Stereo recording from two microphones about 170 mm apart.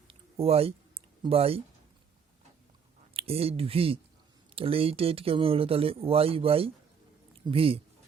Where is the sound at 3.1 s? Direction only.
35° right (ahead or behind).